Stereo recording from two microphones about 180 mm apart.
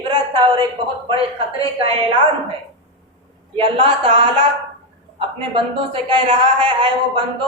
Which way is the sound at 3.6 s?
30° right (ahead or behind).